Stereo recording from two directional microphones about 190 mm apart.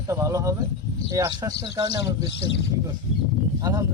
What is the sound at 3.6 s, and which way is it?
Speech, 20° right (ahead or behind).